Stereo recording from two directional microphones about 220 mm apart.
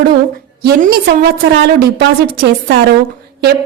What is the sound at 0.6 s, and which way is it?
A woman's voice, 45° right (ahead or behind).